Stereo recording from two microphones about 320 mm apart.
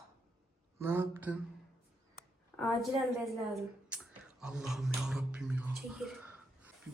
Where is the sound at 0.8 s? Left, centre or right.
Centre.